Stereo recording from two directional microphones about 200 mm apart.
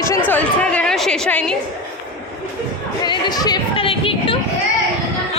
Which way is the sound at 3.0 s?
20° left (ahead or behind).